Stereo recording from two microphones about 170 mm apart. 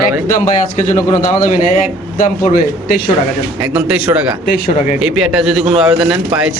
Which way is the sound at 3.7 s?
10° right (ahead or behind).